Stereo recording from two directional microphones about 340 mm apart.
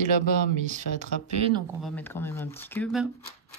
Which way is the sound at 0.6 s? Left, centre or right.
Right.